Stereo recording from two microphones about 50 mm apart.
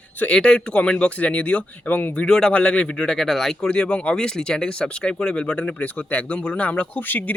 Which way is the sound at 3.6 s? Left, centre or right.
Centre.